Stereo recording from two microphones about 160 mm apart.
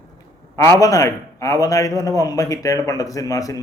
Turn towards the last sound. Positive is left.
turn(degrees=20)  # may be behind; listen again after turning